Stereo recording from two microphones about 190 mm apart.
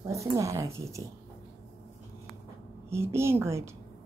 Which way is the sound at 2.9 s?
15° right (ahead or behind).